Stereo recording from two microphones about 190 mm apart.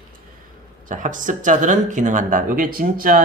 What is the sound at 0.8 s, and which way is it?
Speech, 45° right (ahead or behind).